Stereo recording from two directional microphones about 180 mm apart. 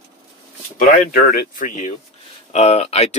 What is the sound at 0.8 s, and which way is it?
Speech, 45° left (ahead or behind).